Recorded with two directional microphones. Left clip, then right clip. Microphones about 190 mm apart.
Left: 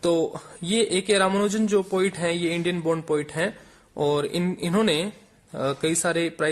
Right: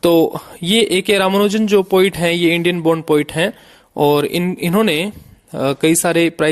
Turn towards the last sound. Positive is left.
turn(degrees=-40)  # may be behind; listen again after turning